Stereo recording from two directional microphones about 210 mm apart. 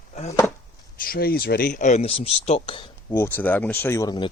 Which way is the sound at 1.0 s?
45° left (ahead or behind).